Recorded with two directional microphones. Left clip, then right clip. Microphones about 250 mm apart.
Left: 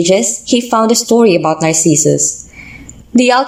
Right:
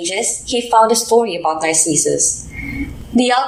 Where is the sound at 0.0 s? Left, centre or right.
Left.